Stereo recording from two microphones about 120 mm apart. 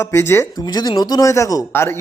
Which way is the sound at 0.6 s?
35° left (ahead or behind).